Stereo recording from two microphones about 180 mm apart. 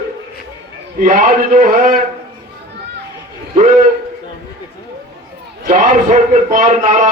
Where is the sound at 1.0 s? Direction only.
45° right (ahead or behind).